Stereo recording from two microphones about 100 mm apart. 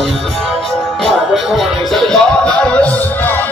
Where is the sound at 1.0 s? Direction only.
Centre (ahead or behind); by 3.3 s 20° left (ahead or behind).